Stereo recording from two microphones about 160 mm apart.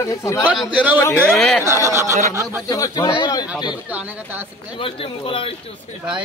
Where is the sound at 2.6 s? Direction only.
20° left (ahead or behind).